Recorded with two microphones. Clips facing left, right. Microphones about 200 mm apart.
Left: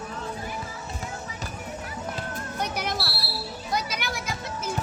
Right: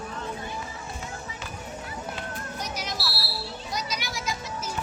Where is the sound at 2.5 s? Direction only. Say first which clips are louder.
Left 6 dB; 60° left (ahead or behind).